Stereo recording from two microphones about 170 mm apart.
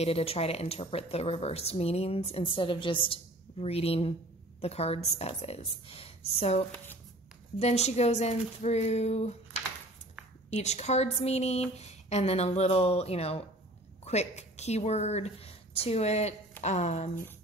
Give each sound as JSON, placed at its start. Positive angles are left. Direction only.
{"t": 0.0, "sound": "speech", "side_deg": 35}
{"t": 10.5, "sound": "a woman's voice", "side_deg": 40}